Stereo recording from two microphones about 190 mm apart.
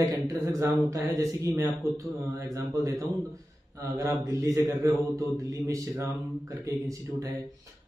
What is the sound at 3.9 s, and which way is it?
Speech, 15° right (ahead or behind).